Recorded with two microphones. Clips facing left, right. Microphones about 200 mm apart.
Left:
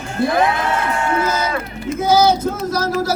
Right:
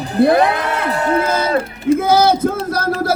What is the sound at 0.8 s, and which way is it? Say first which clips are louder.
Speech: right 3 dB; 35° right (ahead or behind).